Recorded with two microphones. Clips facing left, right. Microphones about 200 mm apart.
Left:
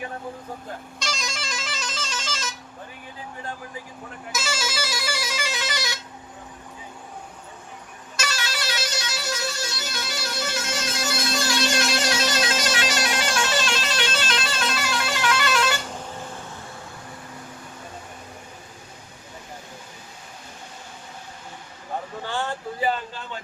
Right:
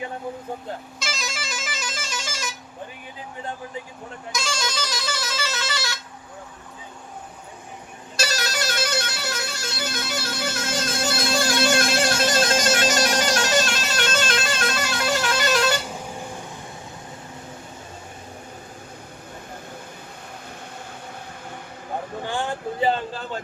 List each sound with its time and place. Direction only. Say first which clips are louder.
0.9 s music: even; 5° right (ahead or behind)
4.3 s music: right 1 dB; 5° left (ahead or behind)
8.1 s music: right 4 dB; 35° right (ahead or behind)
22.2 s a sound: right 2 dB; 15° right (ahead or behind)